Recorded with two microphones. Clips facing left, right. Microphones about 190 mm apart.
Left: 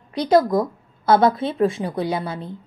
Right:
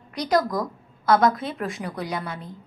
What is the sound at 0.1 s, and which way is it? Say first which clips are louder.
A woman's voice: left 6 dB; 30° left (ahead or behind).